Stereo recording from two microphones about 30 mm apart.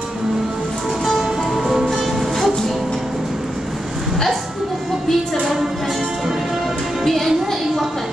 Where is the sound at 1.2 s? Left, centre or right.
Centre.